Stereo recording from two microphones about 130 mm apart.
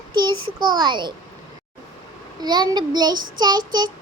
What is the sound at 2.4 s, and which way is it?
Child singing, 30° right (ahead or behind).